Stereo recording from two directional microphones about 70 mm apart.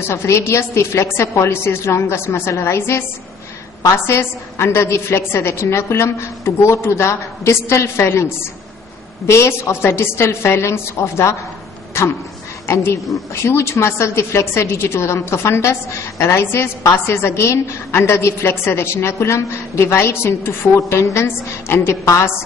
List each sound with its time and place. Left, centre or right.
0.0 s a woman's voice: left